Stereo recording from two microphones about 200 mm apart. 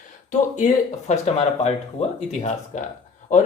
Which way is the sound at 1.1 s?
30° left (ahead or behind).